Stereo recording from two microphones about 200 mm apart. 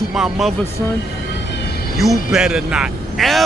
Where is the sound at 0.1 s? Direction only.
Centre (ahead or behind).